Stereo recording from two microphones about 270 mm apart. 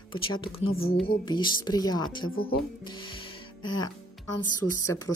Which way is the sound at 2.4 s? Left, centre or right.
Left.